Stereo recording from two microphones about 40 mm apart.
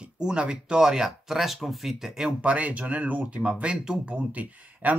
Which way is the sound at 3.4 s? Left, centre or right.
Right.